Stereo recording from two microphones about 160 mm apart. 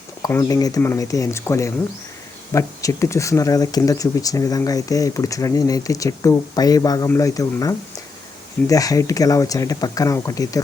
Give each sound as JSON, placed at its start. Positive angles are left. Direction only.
{"t": 0.2, "sound": "speech", "side_deg": 20}